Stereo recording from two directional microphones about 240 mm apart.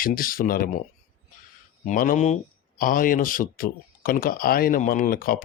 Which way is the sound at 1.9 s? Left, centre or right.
Left.